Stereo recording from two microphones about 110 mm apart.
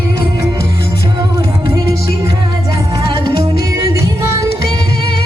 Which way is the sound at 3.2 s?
30° right (ahead or behind).